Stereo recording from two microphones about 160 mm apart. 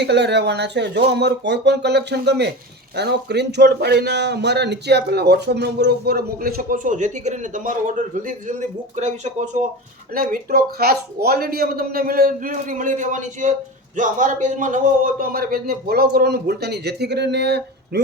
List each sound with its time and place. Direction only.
0.0 s a man's voice: 90° right; by 9.5 s 45° right (ahead or behind)
10.2 s a man's voice: 65° right (ahead or behind); by 18.0 s 90° right